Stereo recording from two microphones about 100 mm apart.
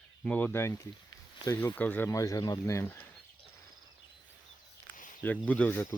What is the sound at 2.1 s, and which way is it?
Speech, 35° left (ahead or behind).